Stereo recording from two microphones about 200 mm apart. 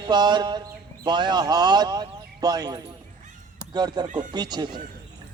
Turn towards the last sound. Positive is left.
turn(degrees=-20)  # may be behind; listen again after turning